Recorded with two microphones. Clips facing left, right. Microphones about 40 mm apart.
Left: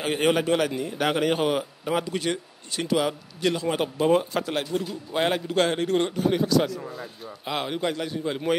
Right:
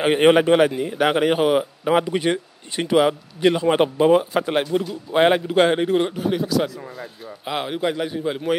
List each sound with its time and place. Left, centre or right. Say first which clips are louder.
0.0 s a man's voice: right 8 dB; right; by 1.7 s centre
1.9 s a man's voice: right 7 dB; right
4.1 s a man's voice: right 5 dB; centre
5.9 s speech: right 2 dB; centre